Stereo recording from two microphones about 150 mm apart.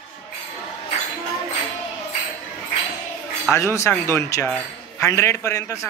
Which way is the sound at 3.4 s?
20° left (ahead or behind).